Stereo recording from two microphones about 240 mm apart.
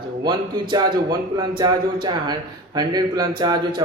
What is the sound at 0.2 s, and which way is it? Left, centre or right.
A man's voice, centre.